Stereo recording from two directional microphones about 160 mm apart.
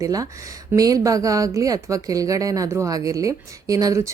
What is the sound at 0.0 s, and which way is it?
Speech, 20° right (ahead or behind).